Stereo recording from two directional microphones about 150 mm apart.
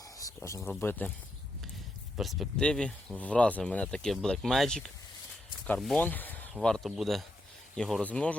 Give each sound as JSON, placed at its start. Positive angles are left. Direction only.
{"t": 0.2, "sound": "speech", "side_deg": 20}
{"t": 2.1, "sound": "speech", "side_deg": 0}
{"t": 6.0, "sound": "a sound", "side_deg": 10}
{"t": 6.5, "sound": "speech", "side_deg": 5}